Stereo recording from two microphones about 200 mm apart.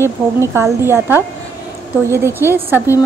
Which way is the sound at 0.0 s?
15° right (ahead or behind).